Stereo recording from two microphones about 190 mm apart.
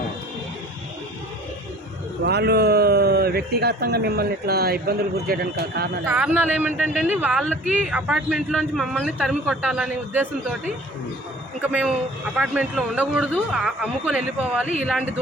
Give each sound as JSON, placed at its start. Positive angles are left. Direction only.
{"t": 2.2, "sound": "a man's voice", "side_deg": -60}
{"t": 6.1, "sound": "a man's voice", "side_deg": -10}
{"t": 11.6, "sound": "a man's voice", "side_deg": -5}